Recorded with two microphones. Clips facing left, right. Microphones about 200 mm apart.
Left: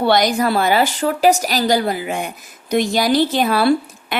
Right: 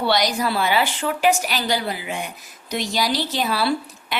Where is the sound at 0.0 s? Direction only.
50° left (ahead or behind).